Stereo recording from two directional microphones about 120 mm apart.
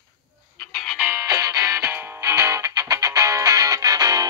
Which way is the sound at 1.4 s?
25° right (ahead or behind).